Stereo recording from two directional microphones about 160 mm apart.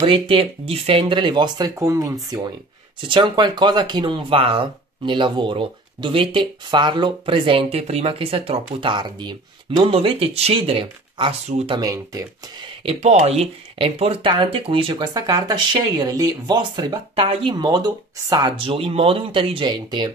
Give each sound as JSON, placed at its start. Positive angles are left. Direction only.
{"t": 0.0, "sound": "speech", "side_deg": -35}
{"t": 3.1, "sound": "speech", "side_deg": -30}
{"t": 11.7, "sound": "speech", "side_deg": -20}
{"t": 12.8, "sound": "speech", "side_deg": -40}